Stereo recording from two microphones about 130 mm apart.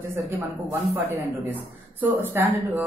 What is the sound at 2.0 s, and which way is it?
Speech, 20° right (ahead or behind).